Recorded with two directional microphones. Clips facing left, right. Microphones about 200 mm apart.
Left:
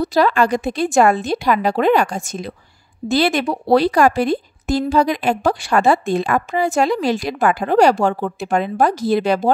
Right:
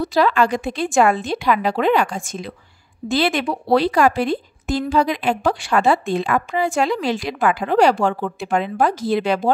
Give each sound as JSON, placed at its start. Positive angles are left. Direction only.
{"t": 0.0, "sound": "a woman's voice", "side_deg": 40}